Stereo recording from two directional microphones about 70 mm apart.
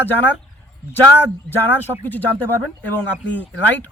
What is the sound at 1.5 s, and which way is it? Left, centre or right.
Speech, left.